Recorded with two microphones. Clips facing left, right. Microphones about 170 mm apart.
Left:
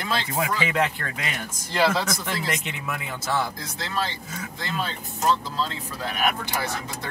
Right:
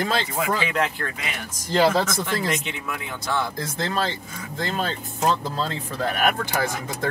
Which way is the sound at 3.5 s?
50° right (ahead or behind).